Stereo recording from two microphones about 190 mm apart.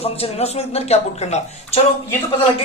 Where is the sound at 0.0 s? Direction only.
35° left (ahead or behind).